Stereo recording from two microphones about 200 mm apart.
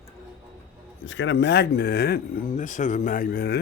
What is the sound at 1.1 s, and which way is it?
Speech, 65° left (ahead or behind).